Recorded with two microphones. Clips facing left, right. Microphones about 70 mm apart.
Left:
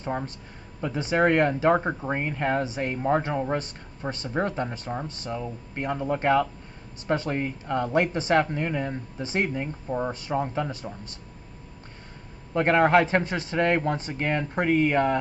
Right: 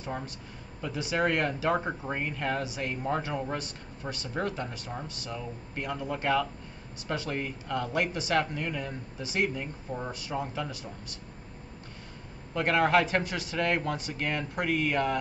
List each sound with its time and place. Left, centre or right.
0.0 s a man's voice: left
12.5 s speech: left